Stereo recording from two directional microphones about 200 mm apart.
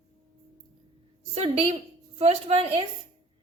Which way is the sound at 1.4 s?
30° right (ahead or behind).